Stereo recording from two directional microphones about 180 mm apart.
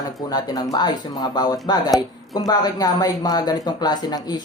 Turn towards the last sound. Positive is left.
turn(degrees=20)  # may be behind; listen again after turning